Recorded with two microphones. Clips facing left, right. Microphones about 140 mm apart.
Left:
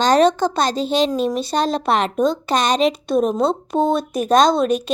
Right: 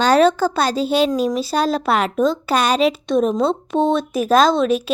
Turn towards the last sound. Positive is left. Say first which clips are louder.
# even
turn(degrees=0)  # may be behind; listen again after turning